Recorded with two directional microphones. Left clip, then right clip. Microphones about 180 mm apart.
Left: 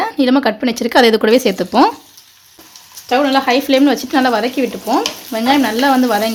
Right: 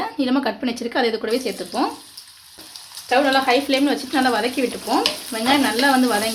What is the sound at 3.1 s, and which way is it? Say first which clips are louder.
A woman's voice: left 4 dB; 55° left (ahead or behind).